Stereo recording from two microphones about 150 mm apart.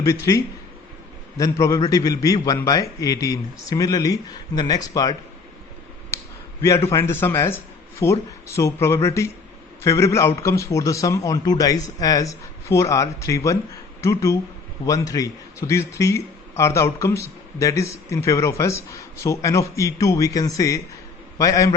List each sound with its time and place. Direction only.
0.0 s a man's voice: 20° left (ahead or behind)
6.6 s a man's voice: 15° left (ahead or behind)